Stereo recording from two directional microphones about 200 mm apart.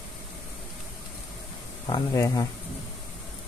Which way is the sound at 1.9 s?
15° left (ahead or behind).